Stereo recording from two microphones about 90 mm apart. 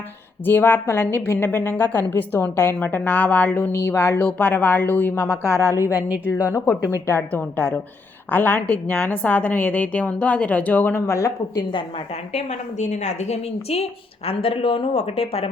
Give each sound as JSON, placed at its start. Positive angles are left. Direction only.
{"t": 0.4, "sound": "a woman's voice", "side_deg": 25}
{"t": 3.7, "sound": "a woman's voice", "side_deg": 35}
{"t": 5.4, "sound": "a woman's voice", "side_deg": -30}
{"t": 6.5, "sound": "a woman's voice", "side_deg": 35}
{"t": 7.3, "sound": "a woman's voice", "side_deg": 20}
{"t": 11.0, "sound": "a woman's voice", "side_deg": 35}
{"t": 14.3, "sound": "speech", "side_deg": 90}